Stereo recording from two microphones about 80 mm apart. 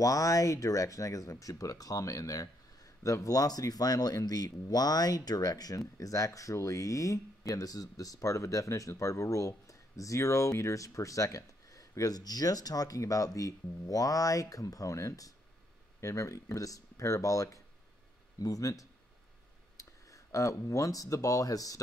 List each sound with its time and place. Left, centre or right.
0.0 s speech: left